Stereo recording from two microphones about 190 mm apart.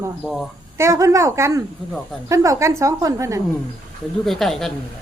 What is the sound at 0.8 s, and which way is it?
Speech, 15° right (ahead or behind).